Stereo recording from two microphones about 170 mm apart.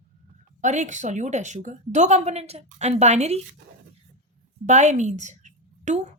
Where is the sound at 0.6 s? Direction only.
45° right (ahead or behind).